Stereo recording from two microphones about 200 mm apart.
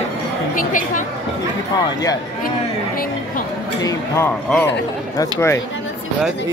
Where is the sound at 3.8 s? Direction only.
15° left (ahead or behind).